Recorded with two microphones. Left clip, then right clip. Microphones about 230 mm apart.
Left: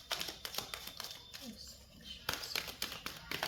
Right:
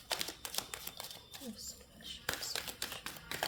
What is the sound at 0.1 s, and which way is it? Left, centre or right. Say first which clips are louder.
Typewriter: right 1 dB; centre.